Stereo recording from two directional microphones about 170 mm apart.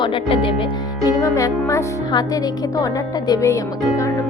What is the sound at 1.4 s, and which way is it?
Speech, 20° left (ahead or behind).